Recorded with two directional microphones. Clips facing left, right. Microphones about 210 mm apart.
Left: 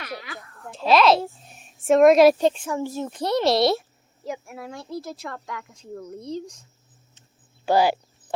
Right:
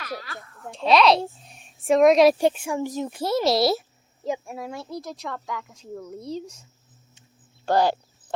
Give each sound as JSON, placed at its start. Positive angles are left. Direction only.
{"t": 0.0, "sound": "speech", "side_deg": 20}
{"t": 0.3, "sound": "a woman's voice", "side_deg": 0}
{"t": 2.4, "sound": "a child's voice", "side_deg": -10}
{"t": 4.2, "sound": "speech", "side_deg": -15}
{"t": 7.6, "sound": "speech", "side_deg": 5}